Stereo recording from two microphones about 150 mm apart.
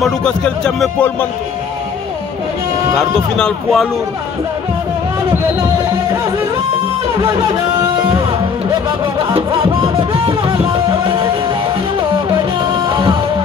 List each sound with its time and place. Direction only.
0.0 s speech: 5° left (ahead or behind)
3.0 s speech: 5° left (ahead or behind)
7.2 s speech: 25° right (ahead or behind)
8.8 s music: 35° right (ahead or behind)
12.8 s music: 30° right (ahead or behind)